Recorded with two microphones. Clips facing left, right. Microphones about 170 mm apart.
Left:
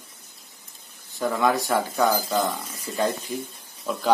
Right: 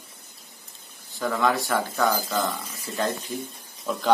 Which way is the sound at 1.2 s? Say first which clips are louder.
Left 1 dB; 15° left (ahead or behind).